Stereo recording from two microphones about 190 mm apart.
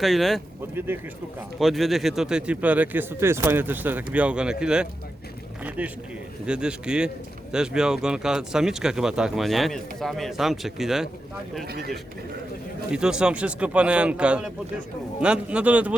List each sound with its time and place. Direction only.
0.0 s speech: centre (ahead or behind)
1.5 s speech: centre (ahead or behind)
11.6 s speech: 55° right (ahead or behind)
12.9 s speech: 5° right (ahead or behind)